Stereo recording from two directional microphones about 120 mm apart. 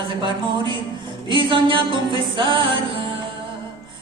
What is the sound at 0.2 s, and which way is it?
Speech, 40° right (ahead or behind).